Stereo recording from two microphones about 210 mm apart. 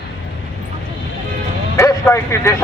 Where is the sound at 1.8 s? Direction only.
15° left (ahead or behind).